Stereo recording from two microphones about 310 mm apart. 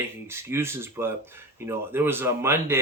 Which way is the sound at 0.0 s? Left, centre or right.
Centre.